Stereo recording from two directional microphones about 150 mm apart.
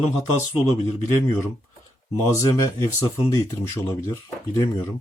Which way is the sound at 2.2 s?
20° left (ahead or behind).